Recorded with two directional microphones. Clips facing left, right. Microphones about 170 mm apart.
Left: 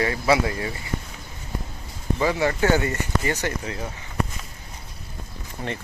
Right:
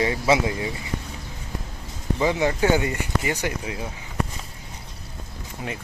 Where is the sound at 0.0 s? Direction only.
20° right (ahead or behind).